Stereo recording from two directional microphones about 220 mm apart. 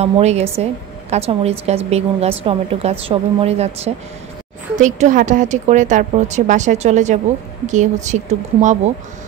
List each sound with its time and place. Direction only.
0.0 s a woman's voice: 30° right (ahead or behind)